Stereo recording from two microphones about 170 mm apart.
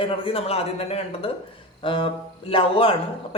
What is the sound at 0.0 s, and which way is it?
Speech, 35° left (ahead or behind).